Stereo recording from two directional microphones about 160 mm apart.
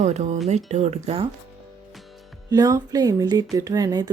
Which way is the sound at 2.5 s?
20° right (ahead or behind).